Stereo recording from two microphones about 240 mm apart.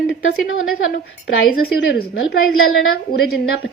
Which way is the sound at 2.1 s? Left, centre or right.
Left.